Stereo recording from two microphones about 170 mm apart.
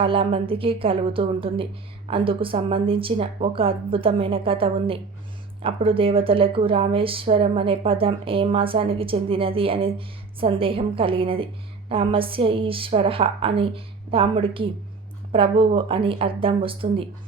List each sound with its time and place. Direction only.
0.0 s speech: 30° right (ahead or behind)